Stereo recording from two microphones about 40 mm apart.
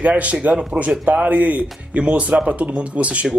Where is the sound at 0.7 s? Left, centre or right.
Right.